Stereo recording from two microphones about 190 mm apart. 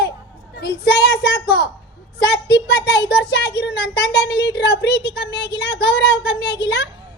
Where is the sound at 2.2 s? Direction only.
60° left (ahead or behind).